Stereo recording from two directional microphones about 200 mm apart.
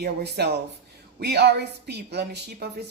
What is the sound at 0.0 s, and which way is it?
A woman's voice, 55° right (ahead or behind).